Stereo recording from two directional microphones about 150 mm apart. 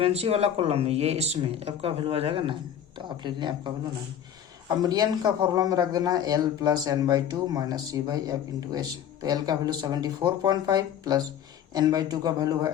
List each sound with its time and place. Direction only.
0.0 s speech: 40° right (ahead or behind)
4.8 s speech: 25° right (ahead or behind)